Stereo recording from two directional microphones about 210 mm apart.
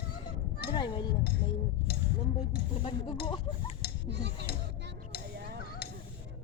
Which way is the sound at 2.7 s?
25° left (ahead or behind).